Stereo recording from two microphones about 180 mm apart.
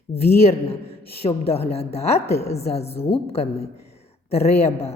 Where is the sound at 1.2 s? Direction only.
35° left (ahead or behind).